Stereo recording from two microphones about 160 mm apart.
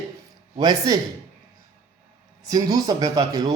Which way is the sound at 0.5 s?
25° right (ahead or behind).